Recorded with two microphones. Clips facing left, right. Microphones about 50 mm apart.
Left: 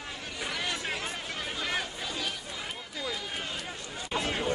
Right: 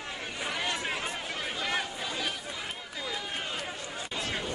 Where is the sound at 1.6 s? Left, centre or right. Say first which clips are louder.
Right 1 dB; centre.